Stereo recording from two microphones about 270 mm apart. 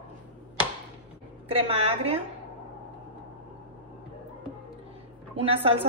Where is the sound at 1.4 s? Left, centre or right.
Right.